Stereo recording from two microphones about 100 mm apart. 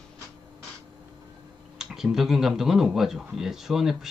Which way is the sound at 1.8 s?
5° right (ahead or behind).